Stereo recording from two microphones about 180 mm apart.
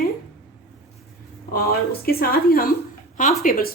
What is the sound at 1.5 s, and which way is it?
A woman's voice, 55° left (ahead or behind).